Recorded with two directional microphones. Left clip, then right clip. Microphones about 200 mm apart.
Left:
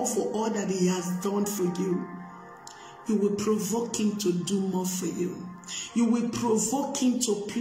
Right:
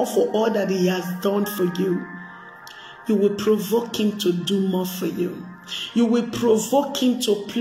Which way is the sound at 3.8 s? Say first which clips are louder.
Right 6 dB; 20° left (ahead or behind).